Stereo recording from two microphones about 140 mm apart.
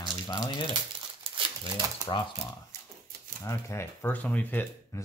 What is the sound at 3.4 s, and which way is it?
Speech, 20° left (ahead or behind).